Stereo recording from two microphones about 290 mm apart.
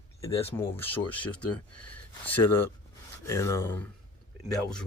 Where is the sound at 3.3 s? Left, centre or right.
Centre.